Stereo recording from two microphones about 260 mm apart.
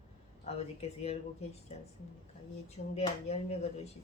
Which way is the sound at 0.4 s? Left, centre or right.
Left.